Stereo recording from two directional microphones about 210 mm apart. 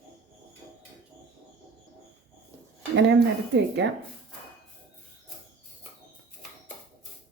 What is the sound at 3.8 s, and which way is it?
Speech, 55° right (ahead or behind).